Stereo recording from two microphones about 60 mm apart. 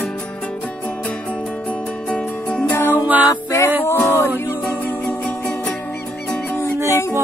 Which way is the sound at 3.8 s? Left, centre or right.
Left.